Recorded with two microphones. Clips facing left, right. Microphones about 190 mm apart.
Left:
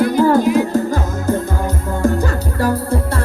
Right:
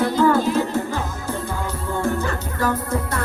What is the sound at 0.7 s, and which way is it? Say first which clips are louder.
Music: left 6 dB; 40° left (ahead or behind).